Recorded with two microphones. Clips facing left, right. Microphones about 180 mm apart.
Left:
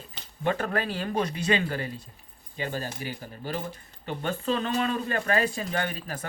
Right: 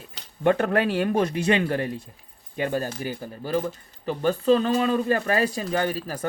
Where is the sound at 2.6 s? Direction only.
50° right (ahead or behind).